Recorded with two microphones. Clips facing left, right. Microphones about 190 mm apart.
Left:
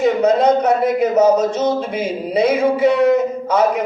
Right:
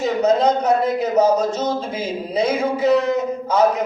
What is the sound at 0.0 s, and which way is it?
Speech, 65° left (ahead or behind).